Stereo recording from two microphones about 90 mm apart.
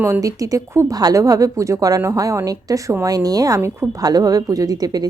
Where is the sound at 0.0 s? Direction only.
35° right (ahead or behind).